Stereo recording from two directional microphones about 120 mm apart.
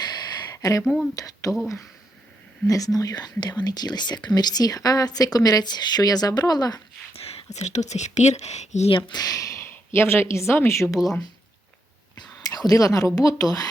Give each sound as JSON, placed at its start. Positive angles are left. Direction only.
{"t": 0.0, "sound": "a sound", "side_deg": 35}
{"t": 1.1, "sound": "speech", "side_deg": 30}
{"t": 2.6, "sound": "speech", "side_deg": 30}
{"t": 7.1, "sound": "speech", "side_deg": 55}
{"t": 8.9, "sound": "a woman's voice", "side_deg": 45}
{"t": 12.4, "sound": "a sound", "side_deg": 30}
{"t": 13.1, "sound": "speech", "side_deg": 30}